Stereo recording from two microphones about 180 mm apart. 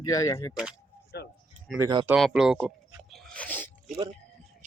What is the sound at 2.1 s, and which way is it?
Speech, 5° right (ahead or behind).